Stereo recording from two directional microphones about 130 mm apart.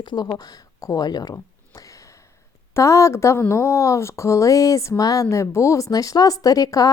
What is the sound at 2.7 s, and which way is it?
A woman's voice, 25° left (ahead or behind).